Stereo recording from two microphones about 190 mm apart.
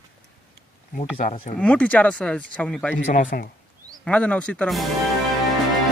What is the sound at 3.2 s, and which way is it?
Speech, 45° left (ahead or behind).